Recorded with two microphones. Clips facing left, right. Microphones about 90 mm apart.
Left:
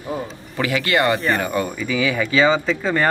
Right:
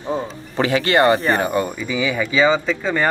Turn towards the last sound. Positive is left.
turn(degrees=0)  # may be behind; listen again after turning